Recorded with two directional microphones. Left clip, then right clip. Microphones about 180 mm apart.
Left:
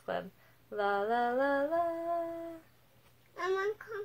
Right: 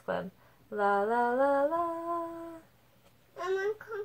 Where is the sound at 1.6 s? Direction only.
20° left (ahead or behind).